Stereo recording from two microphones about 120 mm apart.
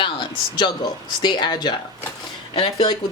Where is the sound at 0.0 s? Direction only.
40° left (ahead or behind).